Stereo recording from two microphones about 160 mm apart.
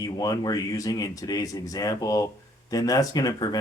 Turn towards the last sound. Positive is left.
turn(degrees=25)  # may be behind; listen again after turning